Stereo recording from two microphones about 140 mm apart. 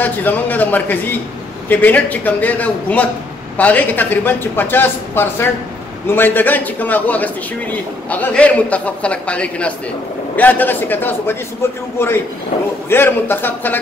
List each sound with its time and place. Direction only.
0.0 s a man's voice: 10° left (ahead or behind)
12.9 s a man's voice: 15° left (ahead or behind)